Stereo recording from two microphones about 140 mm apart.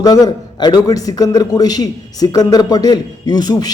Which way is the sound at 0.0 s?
25° left (ahead or behind).